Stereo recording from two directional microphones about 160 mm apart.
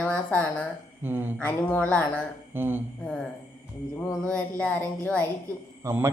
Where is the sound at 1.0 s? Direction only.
15° right (ahead or behind).